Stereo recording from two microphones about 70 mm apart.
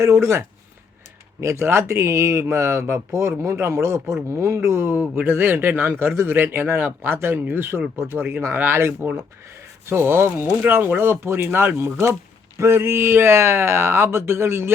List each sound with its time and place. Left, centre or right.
0.0 s speech: right
8.1 s speech: right
8.4 s speech: right